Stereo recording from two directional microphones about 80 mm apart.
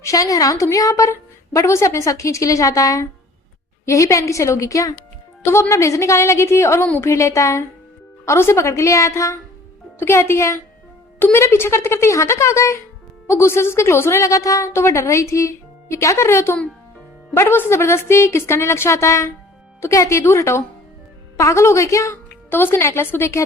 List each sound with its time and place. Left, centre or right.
0.0 s a woman's voice: left